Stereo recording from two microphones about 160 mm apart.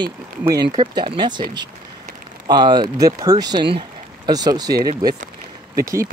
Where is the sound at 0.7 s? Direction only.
30° right (ahead or behind).